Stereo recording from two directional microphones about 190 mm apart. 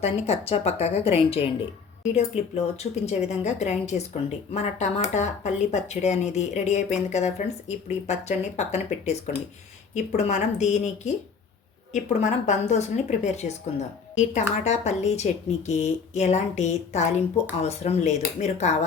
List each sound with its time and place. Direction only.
0.0 s speech: 35° left (ahead or behind)
14.6 s speech: 35° left (ahead or behind)